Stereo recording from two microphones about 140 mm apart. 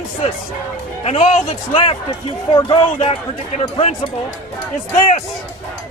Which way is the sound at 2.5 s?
40° left (ahead or behind).